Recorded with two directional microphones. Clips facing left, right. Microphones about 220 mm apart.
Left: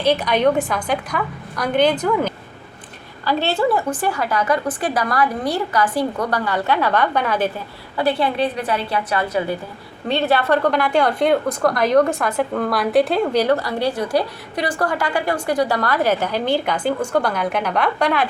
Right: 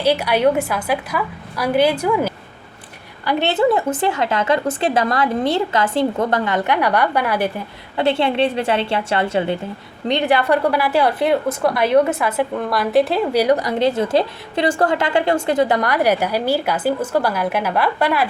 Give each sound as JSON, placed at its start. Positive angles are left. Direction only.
{"t": 0.0, "sound": "a woman's voice", "side_deg": -10}
{"t": 7.9, "sound": "a woman's voice", "side_deg": -25}
{"t": 10.1, "sound": "a woman's voice", "side_deg": -15}